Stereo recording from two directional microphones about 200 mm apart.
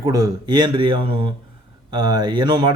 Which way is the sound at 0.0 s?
15° right (ahead or behind).